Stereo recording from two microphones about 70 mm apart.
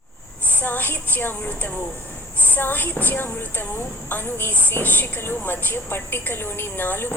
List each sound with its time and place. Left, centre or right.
0.5 s a woman's voice: left